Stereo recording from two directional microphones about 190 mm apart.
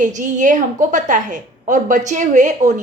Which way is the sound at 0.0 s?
40° right (ahead or behind).